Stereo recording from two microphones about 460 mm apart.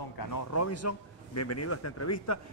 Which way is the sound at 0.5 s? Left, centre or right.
Left.